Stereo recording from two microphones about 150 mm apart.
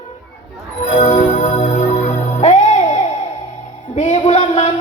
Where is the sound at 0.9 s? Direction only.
55° left (ahead or behind).